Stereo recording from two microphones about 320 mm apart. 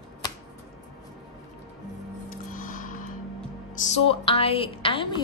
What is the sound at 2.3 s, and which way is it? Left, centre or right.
Music, left.